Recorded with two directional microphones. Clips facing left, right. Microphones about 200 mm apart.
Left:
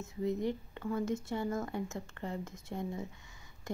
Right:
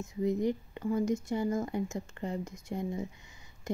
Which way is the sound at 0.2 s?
15° right (ahead or behind).